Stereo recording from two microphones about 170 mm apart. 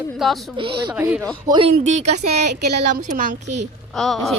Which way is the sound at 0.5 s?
30° right (ahead or behind).